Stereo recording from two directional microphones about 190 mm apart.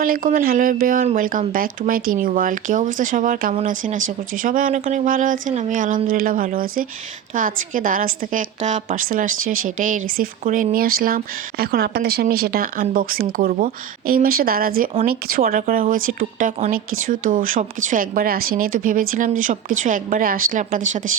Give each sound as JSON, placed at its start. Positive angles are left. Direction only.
{"t": 0.0, "sound": "a woman's voice", "side_deg": -50}